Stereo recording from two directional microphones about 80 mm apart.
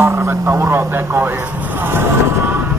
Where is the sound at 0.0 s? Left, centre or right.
Right.